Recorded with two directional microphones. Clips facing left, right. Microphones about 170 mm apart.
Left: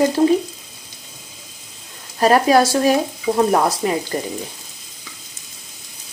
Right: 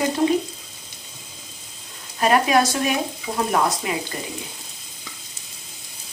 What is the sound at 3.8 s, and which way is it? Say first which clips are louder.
Speech: left 6 dB; 40° left (ahead or behind).